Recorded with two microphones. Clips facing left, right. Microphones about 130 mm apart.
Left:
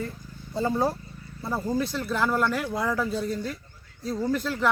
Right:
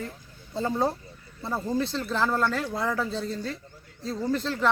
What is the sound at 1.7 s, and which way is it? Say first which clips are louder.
Speech: right 1 dB; 25° right (ahead or behind).